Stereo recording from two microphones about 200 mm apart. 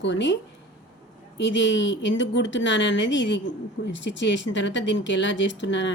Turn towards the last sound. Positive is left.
turn(degrees=65)  # may be behind; listen again after turning